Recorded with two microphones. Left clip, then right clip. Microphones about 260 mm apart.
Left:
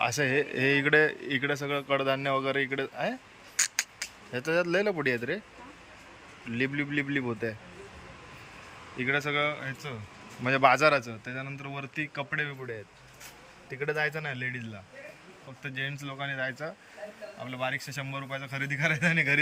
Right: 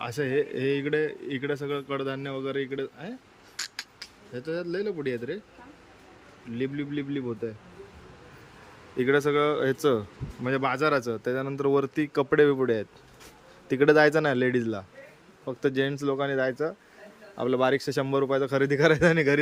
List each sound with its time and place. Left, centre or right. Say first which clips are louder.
0.0 s a man's voice: left 1 dB; centre
3.6 s a sound: left 6 dB; centre
6.5 s a man's voice: left 2 dB; centre
9.0 s speech: right 5 dB; centre
10.4 s speech: left 4 dB; centre
13.7 s speech: right 11 dB; right